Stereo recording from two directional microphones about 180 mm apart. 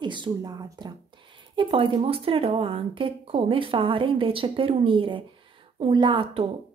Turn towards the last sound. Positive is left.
turn(degrees=-30)  # may be behind; listen again after turning